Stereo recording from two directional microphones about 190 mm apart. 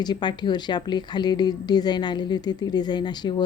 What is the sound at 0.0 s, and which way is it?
A woman's voice, 20° left (ahead or behind).